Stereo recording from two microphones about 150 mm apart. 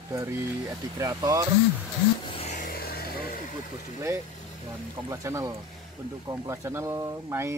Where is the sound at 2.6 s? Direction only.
90° left.